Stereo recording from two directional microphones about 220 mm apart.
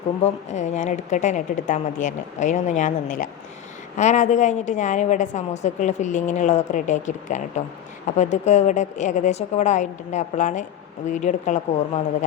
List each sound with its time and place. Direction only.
0.2 s a woman's voice: 30° left (ahead or behind)